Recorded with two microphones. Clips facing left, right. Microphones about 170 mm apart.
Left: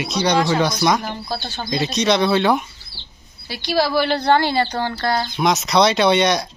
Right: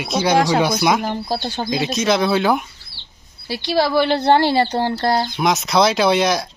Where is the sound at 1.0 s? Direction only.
35° right (ahead or behind).